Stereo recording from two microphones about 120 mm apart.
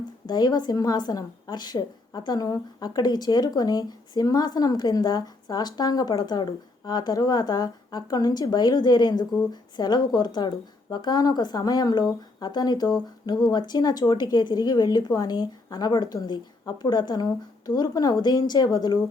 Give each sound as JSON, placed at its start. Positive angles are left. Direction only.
{"t": 0.3, "sound": "a woman's voice", "side_deg": 35}